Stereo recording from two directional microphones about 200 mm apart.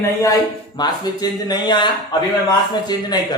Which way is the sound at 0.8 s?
20° left (ahead or behind).